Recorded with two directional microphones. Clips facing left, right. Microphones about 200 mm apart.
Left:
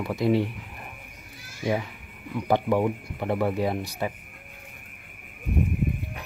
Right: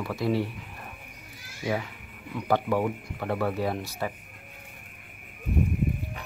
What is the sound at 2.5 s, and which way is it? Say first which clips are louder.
Speech: left 2 dB; 15° left (ahead or behind).